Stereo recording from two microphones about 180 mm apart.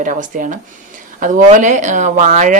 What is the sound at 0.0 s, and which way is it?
Speech, 45° right (ahead or behind).